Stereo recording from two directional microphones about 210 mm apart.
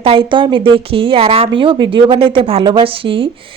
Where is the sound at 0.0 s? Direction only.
25° right (ahead or behind).